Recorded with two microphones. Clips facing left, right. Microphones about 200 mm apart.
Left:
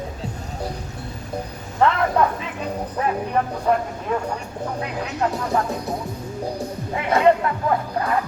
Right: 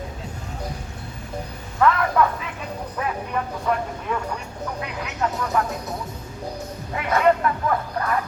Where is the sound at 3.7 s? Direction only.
35° left (ahead or behind).